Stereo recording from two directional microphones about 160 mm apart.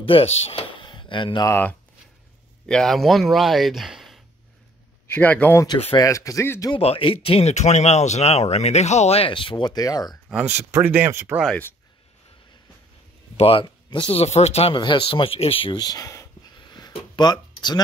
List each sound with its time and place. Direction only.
0.0 s speech: 35° left (ahead or behind)
1.5 s speech: 10° left (ahead or behind)
2.7 s speech: centre (ahead or behind)
5.1 s speech: 10° left (ahead or behind)
6.7 s speech: 35° left (ahead or behind)
10.4 s speech: 15° right (ahead or behind)
13.4 s speech: 35° left (ahead or behind)